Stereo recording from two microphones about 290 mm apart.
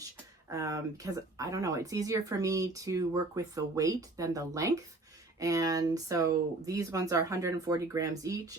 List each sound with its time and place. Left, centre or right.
0.4 s speech: centre